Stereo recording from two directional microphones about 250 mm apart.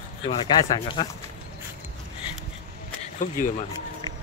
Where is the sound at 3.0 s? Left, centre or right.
Left.